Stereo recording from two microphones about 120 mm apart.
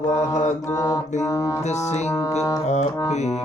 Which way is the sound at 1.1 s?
80° left.